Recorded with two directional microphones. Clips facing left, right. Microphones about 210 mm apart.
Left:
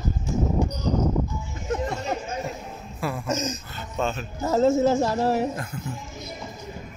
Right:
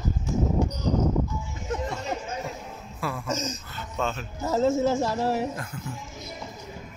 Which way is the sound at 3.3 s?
50° left (ahead or behind).